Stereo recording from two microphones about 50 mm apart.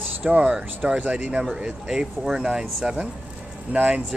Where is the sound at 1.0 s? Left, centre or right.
Right.